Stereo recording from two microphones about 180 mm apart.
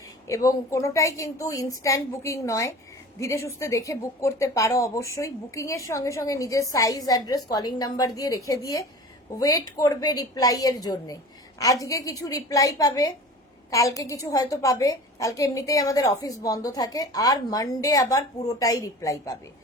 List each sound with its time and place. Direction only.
0.3 s a woman's voice: 15° left (ahead or behind)